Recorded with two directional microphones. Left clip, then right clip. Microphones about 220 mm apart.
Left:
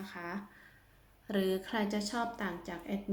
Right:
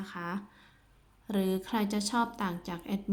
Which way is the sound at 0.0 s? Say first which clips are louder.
Right 4 dB; 30° right (ahead or behind).